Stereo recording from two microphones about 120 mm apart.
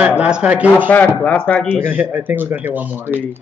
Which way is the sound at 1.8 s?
15° right (ahead or behind).